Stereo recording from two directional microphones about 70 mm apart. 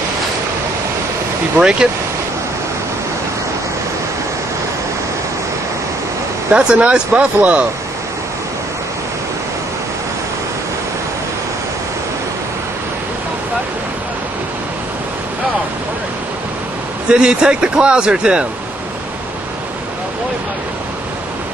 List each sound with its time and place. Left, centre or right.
1.6 s a man's voice: centre
6.5 s a man's voice: centre
17.1 s a man's voice: centre